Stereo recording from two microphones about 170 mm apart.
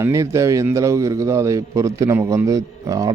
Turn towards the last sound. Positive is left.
turn(degrees=-20)  # may be behind; listen again after turning